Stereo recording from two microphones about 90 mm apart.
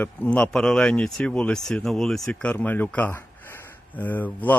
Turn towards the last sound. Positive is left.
turn(degrees=20)  # may be behind; listen again after turning